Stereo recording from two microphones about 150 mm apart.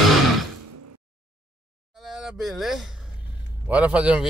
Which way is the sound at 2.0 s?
5° right (ahead or behind).